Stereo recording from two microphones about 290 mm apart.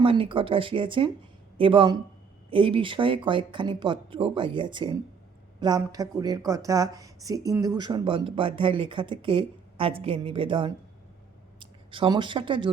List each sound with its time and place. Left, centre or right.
0.0 s speech: centre